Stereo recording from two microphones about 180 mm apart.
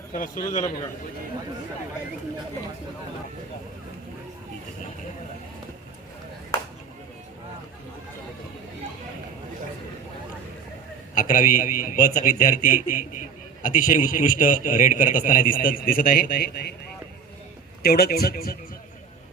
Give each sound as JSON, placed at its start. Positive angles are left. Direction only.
{"t": 0.1, "sound": "a man's voice", "side_deg": 45}
{"t": 11.1, "sound": "a man's voice", "side_deg": 50}
{"t": 17.8, "sound": "a man's voice", "side_deg": 60}